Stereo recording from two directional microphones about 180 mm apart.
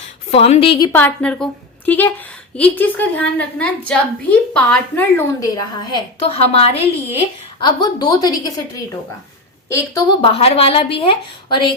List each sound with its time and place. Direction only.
0.3 s speech: 35° left (ahead or behind)
0.9 s a woman's voice: 10° left (ahead or behind)
5.5 s speech: 25° left (ahead or behind)
7.6 s a woman's voice: 20° left (ahead or behind)
9.6 s a woman's voice: 15° left (ahead or behind)
10.2 s speech: 35° left (ahead or behind)